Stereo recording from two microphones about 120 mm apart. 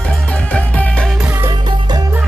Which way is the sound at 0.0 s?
10° left (ahead or behind).